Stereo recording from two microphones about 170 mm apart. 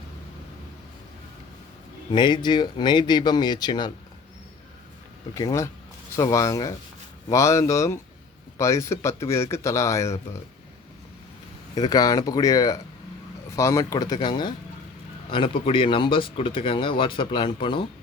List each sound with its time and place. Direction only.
2.1 s speech: 25° left (ahead or behind)
5.3 s speech: 20° left (ahead or behind)
11.7 s speech: 25° left (ahead or behind)